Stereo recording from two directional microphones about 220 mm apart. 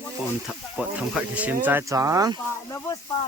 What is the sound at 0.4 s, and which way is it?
Speech, 5° right (ahead or behind).